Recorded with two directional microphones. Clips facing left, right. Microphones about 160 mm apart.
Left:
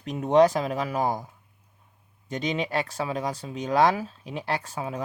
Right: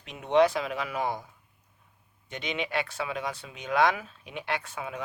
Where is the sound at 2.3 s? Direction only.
40° left (ahead or behind).